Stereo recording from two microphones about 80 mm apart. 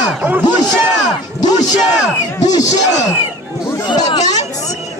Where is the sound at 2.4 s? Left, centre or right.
Left.